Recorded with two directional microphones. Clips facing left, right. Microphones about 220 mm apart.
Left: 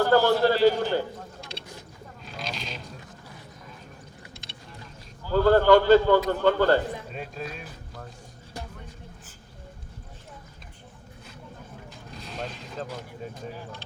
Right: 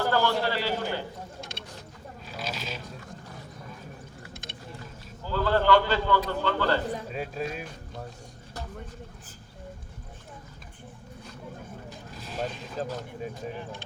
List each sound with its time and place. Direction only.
0.1 s a man's voice: 40° left (ahead or behind)
2.2 s a sound: 5° right (ahead or behind)
5.3 s a man's voice: 45° left (ahead or behind)
7.1 s speech: 5° right (ahead or behind)
11.9 s vehicle: 5° right (ahead or behind)